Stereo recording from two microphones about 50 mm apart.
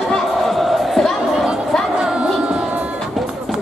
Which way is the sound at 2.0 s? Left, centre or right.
Centre.